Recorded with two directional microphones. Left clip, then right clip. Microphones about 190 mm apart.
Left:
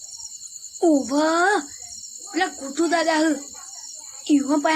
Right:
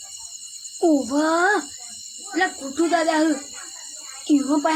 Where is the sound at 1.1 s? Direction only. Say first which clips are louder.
Even; 30° left (ahead or behind).